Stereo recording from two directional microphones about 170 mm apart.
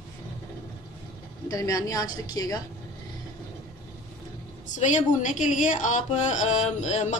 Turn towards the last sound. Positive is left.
turn(degrees=40)  # may be behind; listen again after turning